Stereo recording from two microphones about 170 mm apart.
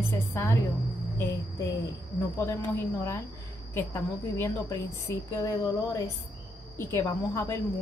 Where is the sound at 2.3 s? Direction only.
15° left (ahead or behind).